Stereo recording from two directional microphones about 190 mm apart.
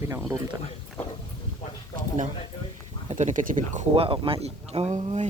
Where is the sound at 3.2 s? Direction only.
40° right (ahead or behind).